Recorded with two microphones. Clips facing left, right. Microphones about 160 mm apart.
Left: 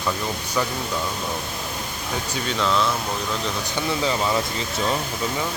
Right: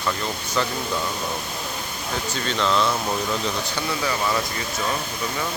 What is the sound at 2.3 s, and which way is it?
Speech, 5° left (ahead or behind).